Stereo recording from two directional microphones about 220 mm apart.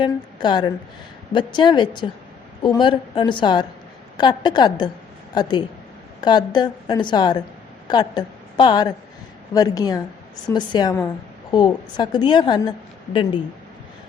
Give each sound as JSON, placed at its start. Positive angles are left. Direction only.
{"t": 0.0, "sound": "a woman's voice", "side_deg": 20}